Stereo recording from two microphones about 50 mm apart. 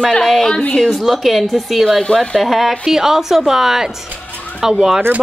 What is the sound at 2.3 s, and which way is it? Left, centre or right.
A woman's voice, centre.